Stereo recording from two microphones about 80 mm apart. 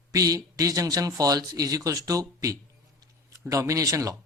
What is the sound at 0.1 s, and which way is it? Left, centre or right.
A man's voice, right.